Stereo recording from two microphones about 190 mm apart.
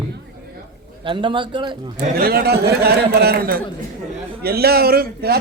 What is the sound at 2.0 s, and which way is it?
A man's voice, 55° right (ahead or behind).